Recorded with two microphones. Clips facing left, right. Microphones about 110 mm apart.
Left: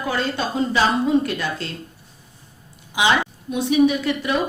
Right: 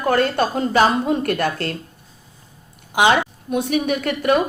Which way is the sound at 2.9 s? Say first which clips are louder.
Right 3 dB; 45° right (ahead or behind).